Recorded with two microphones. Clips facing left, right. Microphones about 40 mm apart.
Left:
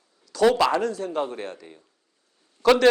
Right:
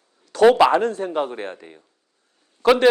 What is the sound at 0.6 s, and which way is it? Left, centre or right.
Speech, right.